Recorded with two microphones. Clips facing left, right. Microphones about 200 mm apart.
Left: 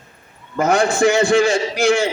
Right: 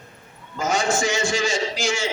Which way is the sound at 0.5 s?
60° left (ahead or behind).